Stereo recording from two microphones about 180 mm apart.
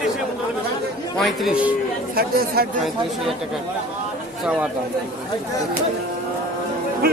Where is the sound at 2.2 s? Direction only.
55° right (ahead or behind).